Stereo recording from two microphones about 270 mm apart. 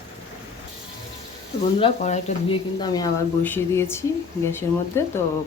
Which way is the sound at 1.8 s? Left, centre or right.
Left.